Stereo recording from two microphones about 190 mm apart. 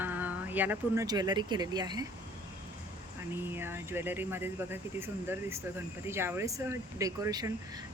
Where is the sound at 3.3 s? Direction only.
10° right (ahead or behind).